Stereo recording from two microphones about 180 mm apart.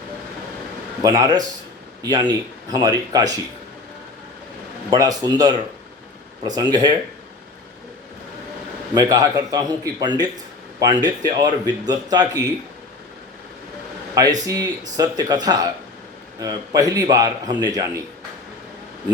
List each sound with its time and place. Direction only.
1.0 s speech: 20° right (ahead or behind)
4.9 s speech: 20° right (ahead or behind)
9.0 s speech: 20° right (ahead or behind)
14.4 s speech: 20° right (ahead or behind)